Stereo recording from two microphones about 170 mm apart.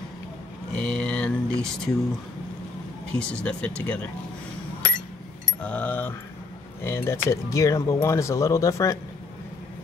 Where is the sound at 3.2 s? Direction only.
5° left (ahead or behind).